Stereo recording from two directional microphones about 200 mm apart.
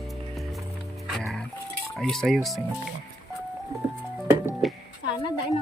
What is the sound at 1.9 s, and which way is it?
Speech, centre (ahead or behind).